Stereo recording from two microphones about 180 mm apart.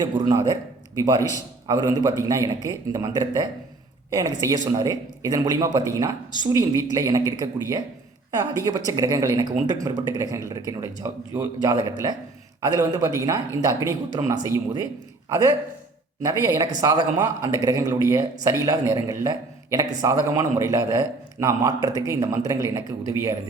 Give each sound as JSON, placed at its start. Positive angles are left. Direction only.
{"t": 0.0, "sound": "speech", "side_deg": -20}
{"t": 1.6, "sound": "speech", "side_deg": -20}
{"t": 16.2, "sound": "speech", "side_deg": -15}